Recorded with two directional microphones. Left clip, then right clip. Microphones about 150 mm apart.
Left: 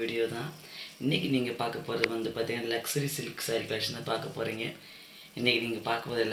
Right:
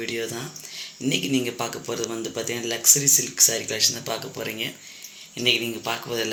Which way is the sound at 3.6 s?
15° right (ahead or behind).